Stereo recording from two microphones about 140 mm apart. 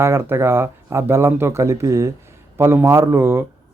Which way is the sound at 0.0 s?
20° right (ahead or behind).